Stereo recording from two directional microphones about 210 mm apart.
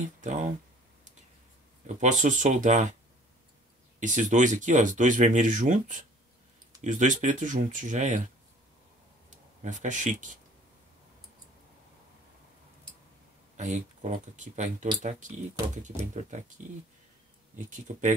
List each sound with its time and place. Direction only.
0.0 s speech: 35° right (ahead or behind)
2.0 s speech: 35° right (ahead or behind)
4.0 s speech: 35° right (ahead or behind)
9.6 s speech: 35° right (ahead or behind)
13.6 s speech: 35° right (ahead or behind)
17.6 s speech: 35° right (ahead or behind)